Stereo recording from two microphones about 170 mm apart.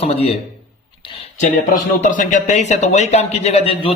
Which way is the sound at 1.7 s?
50° left (ahead or behind).